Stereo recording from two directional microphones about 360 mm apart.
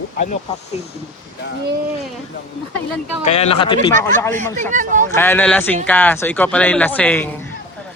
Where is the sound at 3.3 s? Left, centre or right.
Centre.